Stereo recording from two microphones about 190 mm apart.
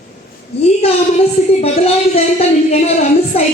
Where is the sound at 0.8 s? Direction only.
30° left (ahead or behind).